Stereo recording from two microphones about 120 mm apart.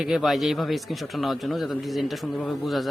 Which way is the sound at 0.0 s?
Centre (ahead or behind).